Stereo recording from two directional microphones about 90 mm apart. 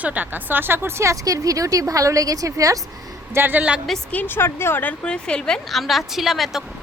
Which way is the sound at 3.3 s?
20° right (ahead or behind).